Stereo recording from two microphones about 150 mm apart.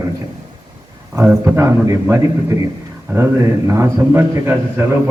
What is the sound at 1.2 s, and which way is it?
A man's voice, 20° right (ahead or behind).